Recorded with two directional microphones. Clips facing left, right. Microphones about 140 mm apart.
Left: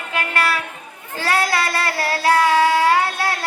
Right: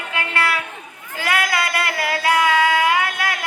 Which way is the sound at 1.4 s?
20° right (ahead or behind).